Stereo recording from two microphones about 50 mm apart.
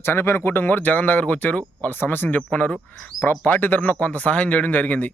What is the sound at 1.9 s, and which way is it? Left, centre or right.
A man's voice, left.